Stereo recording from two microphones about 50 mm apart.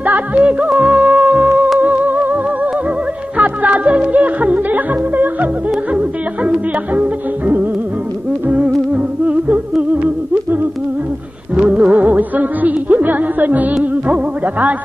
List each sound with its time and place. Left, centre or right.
0.0 s music: right
0.8 s music: centre
1.8 s music: right
5.9 s music: right
11.5 s music: right